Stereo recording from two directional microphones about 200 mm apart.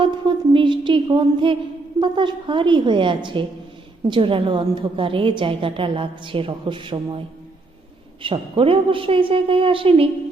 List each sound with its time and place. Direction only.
0.0 s a woman's voice: 25° right (ahead or behind)
8.2 s a woman's voice: 25° right (ahead or behind)